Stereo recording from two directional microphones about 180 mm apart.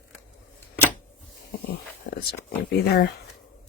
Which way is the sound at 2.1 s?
65° left (ahead or behind).